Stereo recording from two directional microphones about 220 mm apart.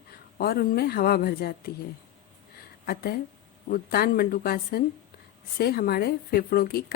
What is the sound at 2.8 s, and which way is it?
Speech, 45° left (ahead or behind).